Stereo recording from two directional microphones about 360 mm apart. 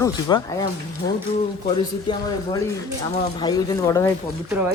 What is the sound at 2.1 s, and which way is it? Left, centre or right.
Speech, centre.